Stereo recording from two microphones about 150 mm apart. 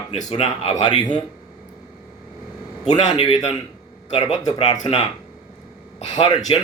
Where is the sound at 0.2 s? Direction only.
45° left (ahead or behind).